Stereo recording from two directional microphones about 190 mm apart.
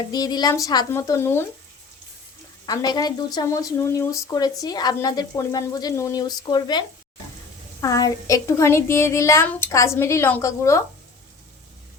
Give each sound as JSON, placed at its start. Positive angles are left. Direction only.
{"t": 0.1, "sound": "a woman's voice", "side_deg": 20}
{"t": 2.6, "sound": "a woman's voice", "side_deg": 20}